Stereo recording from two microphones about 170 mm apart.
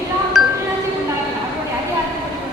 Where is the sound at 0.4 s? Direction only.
5° right (ahead or behind).